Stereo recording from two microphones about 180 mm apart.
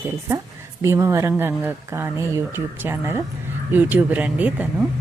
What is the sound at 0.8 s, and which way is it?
Speech, 15° right (ahead or behind).